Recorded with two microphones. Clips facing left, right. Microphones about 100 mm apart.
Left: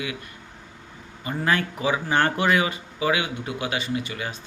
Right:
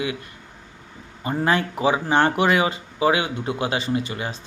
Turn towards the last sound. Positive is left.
turn(degrees=-30)  # may be behind; listen again after turning